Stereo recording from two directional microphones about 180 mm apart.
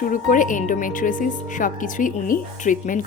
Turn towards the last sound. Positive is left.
turn(degrees=45)  # may be behind; listen again after turning